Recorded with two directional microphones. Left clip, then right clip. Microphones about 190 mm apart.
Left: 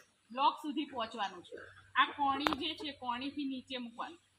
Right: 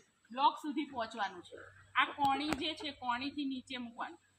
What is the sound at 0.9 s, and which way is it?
Speech, 10° right (ahead or behind).